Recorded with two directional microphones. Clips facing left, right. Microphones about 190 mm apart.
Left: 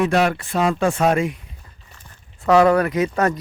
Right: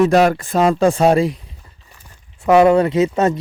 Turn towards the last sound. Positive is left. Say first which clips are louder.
# right 4 dB
turn(degrees=-25)  # may be behind; listen again after turning